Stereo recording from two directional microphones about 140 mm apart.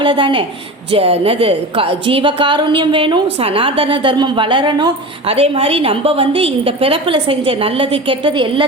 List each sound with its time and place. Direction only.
0.0 s a woman's voice: 35° right (ahead or behind)